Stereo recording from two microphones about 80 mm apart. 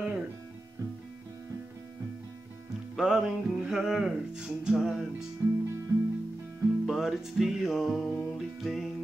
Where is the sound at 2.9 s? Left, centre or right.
Centre.